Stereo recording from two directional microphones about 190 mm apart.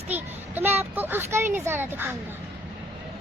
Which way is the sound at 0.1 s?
10° right (ahead or behind).